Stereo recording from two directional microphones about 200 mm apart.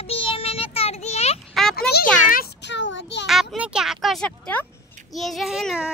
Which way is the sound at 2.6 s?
60° left (ahead or behind).